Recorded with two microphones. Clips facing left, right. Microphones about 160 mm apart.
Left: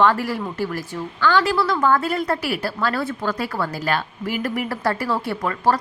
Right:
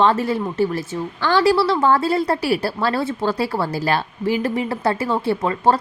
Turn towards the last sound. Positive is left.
turn(degrees=-25)  # may be behind; listen again after turning